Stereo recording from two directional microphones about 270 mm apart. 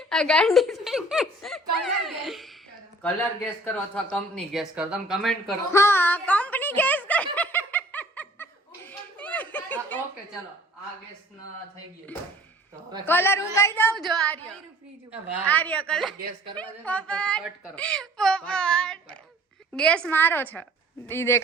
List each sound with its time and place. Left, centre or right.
0.1 s speech: centre
7.3 s snicker: centre
13.1 s a woman's voice: centre
15.4 s a woman's voice: centre